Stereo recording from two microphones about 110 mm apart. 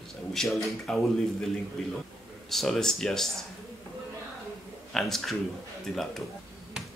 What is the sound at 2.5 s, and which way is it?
Speech, centre (ahead or behind).